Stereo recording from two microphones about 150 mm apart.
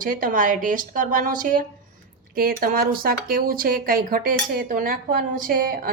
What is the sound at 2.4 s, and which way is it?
Speech, 80° right.